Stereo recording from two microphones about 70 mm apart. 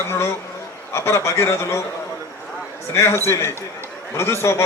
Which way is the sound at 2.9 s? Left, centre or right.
Left.